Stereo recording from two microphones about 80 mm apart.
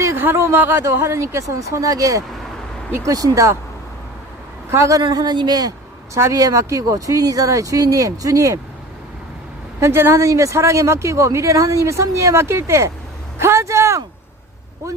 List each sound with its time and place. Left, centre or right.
0.2 s speech: right
0.9 s speech: right
4.7 s speech: right
5.1 s speech: right
6.3 s speech: right
9.8 s speech: right